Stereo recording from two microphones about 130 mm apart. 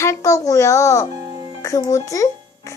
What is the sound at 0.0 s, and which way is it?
A child's voice, 25° left (ahead or behind).